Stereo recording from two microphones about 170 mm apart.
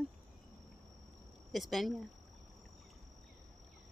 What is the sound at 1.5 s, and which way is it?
Speech, centre (ahead or behind).